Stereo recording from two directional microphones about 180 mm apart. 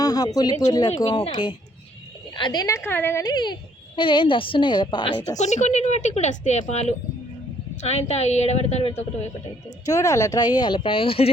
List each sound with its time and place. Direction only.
0.0 s a sound: 20° left (ahead or behind)
0.9 s a child's voice: 25° left (ahead or behind)
2.3 s a child's voice: 25° left (ahead or behind)
5.4 s a woman's voice: 40° left (ahead or behind)
9.8 s a child's voice: 20° left (ahead or behind)